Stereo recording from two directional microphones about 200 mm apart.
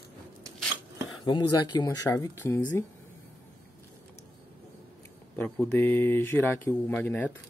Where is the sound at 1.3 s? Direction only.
20° left (ahead or behind).